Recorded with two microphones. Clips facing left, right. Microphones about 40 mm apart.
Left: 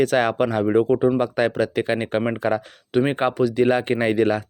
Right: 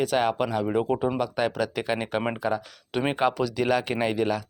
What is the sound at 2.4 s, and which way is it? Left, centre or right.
Speech, left.